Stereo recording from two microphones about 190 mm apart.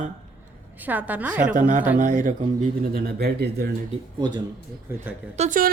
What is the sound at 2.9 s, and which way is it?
Speech, 60° right (ahead or behind).